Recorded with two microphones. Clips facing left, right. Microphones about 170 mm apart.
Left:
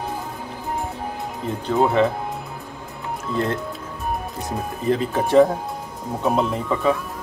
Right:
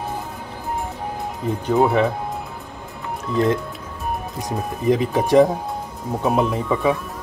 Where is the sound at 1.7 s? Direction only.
15° right (ahead or behind).